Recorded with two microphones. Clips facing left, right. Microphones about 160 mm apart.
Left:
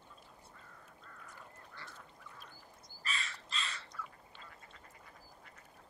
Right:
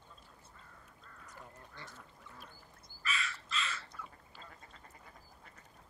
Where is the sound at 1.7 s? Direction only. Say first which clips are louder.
Right 1 dB; 20° right (ahead or behind).